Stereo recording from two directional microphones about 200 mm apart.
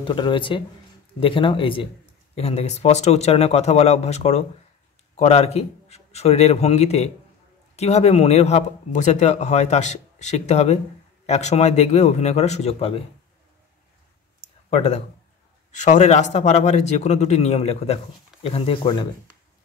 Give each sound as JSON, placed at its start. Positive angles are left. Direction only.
{"t": 0.0, "sound": "speech", "side_deg": 25}
{"t": 14.7, "sound": "speech", "side_deg": 35}